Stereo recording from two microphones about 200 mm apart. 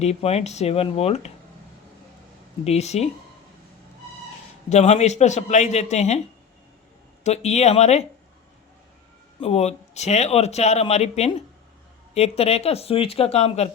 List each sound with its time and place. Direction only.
0.0 s speech: 30° left (ahead or behind)
2.6 s speech: 35° left (ahead or behind)
4.7 s speech: 35° left (ahead or behind)
7.3 s speech: 35° left (ahead or behind)
9.4 s speech: 30° left (ahead or behind)